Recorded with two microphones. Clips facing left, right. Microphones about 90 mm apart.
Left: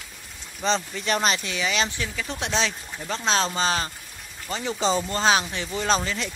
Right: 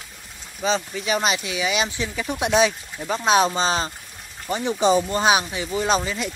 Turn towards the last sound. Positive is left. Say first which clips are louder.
# right 2 dB
turn(degrees=-10)  # may be behind; listen again after turning